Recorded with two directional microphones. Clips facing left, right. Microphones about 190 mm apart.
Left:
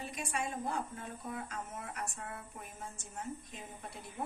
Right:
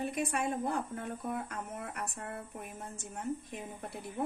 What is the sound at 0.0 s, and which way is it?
A woman's voice, 55° right (ahead or behind).